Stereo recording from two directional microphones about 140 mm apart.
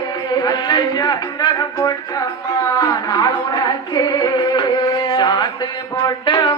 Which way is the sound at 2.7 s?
30° left (ahead or behind).